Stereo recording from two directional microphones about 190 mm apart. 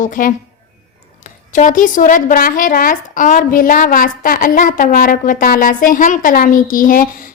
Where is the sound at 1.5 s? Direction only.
40° left (ahead or behind).